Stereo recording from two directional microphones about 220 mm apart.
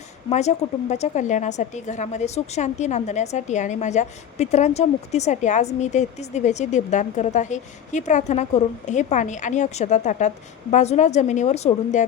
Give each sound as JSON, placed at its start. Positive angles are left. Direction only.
{"t": 0.3, "sound": "a woman's voice", "side_deg": 30}